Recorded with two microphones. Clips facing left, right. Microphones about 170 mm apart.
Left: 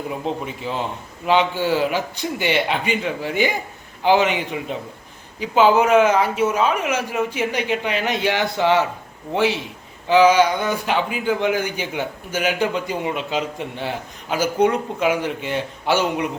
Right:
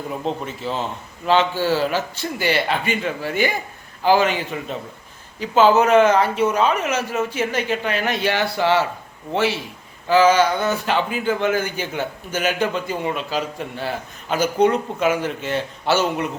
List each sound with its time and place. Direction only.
0.1 s a man's voice: 10° left (ahead or behind)